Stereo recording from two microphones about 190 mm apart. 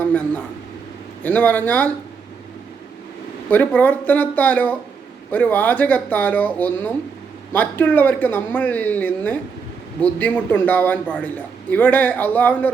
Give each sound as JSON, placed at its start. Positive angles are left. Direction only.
{"t": 0.1, "sound": "speech", "side_deg": 10}
{"t": 3.5, "sound": "speech", "side_deg": 10}